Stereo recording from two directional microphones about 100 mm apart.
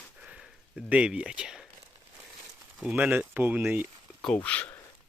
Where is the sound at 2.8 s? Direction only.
15° right (ahead or behind).